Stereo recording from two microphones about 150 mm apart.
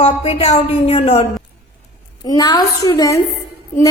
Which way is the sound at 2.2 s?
25° left (ahead or behind).